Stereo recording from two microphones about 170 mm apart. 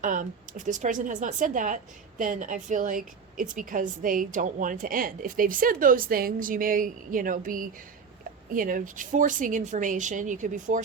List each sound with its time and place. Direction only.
0.0 s a woman's voice: 50° right (ahead or behind)